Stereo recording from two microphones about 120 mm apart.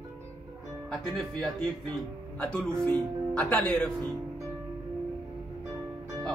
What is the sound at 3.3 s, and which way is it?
Speech, 10° left (ahead or behind).